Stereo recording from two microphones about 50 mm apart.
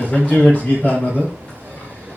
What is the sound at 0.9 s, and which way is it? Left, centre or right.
Speech, right.